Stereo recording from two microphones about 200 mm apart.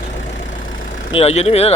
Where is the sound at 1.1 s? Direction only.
30° left (ahead or behind).